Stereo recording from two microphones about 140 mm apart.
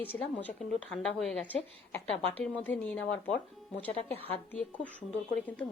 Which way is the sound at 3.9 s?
45° left (ahead or behind).